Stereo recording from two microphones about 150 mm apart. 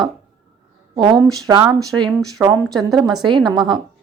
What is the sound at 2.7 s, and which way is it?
Speech, centre (ahead or behind).